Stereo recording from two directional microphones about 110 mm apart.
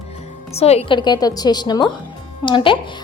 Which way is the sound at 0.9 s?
40° left (ahead or behind).